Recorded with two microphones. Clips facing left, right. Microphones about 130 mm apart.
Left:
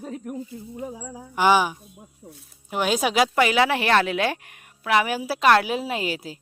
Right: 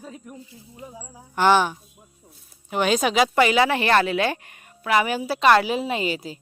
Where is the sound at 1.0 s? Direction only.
90° left.